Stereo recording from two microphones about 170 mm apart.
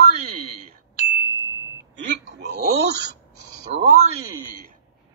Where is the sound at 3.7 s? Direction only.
40° right (ahead or behind).